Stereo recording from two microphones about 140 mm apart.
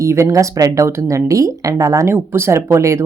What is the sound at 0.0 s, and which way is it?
Speech, 20° right (ahead or behind).